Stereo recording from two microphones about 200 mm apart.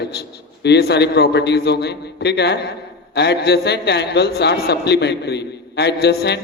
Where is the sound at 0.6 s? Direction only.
55° left (ahead or behind).